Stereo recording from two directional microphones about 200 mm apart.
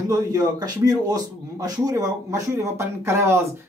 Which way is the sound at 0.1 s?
20° right (ahead or behind).